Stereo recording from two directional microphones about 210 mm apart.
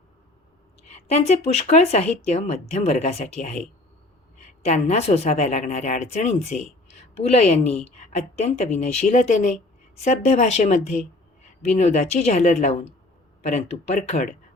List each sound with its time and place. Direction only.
0.9 s a woman's voice: 35° left (ahead or behind)